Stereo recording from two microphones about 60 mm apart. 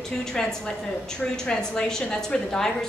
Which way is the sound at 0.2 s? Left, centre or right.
Centre.